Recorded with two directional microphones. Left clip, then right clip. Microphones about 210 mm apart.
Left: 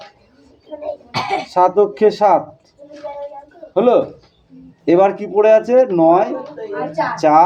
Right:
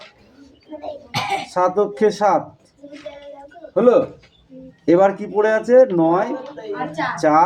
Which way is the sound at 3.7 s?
30° right (ahead or behind).